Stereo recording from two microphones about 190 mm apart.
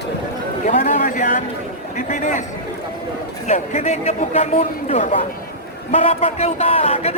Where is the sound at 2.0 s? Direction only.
40° left (ahead or behind).